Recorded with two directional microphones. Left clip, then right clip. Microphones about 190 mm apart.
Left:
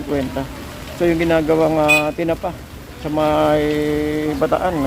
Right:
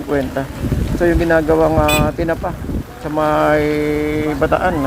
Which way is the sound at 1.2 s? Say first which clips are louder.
Right 2 dB; 15° left (ahead or behind).